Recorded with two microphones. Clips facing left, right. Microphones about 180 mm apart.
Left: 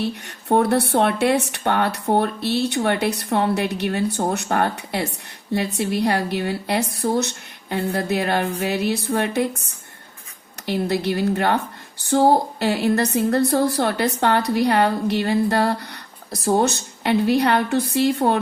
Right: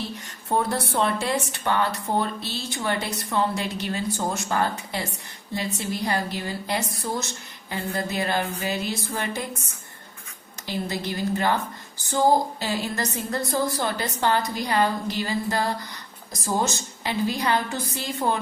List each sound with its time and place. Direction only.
0.0 s speech: 65° left (ahead or behind)
10.7 s speech: 65° left (ahead or behind)